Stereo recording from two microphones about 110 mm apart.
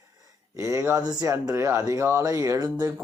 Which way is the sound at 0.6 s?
25° right (ahead or behind).